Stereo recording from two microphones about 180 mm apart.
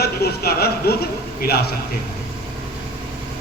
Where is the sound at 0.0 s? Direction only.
60° left (ahead or behind).